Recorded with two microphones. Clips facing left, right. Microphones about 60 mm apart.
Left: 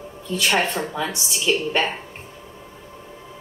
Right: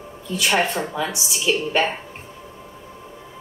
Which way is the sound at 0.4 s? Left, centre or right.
Right.